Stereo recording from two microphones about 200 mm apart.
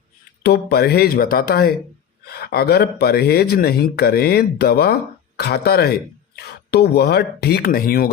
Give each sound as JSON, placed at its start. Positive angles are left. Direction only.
{"t": 0.4, "sound": "a man's voice", "side_deg": 50}